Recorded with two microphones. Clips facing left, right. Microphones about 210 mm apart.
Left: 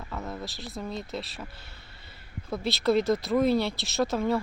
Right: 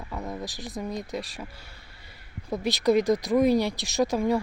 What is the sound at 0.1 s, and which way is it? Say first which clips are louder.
Speech: right 2 dB; 15° right (ahead or behind).